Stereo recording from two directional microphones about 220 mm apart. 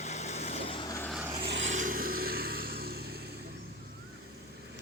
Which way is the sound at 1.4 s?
50° right (ahead or behind).